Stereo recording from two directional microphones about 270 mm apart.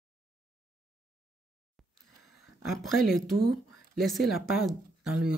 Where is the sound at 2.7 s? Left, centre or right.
Centre.